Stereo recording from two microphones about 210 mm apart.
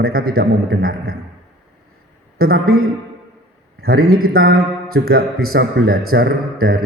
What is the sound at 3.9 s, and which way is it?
Speech, 90° right.